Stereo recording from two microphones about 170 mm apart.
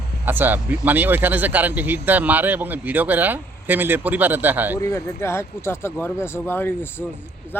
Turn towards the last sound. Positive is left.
turn(degrees=10)  # may be behind; listen again after turning